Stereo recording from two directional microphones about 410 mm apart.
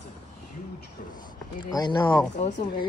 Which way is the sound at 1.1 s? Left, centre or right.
Centre.